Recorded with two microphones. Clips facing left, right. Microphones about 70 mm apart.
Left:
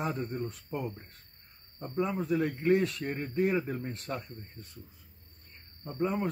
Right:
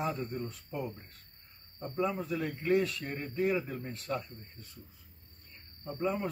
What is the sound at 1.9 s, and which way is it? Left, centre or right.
A man's voice, left.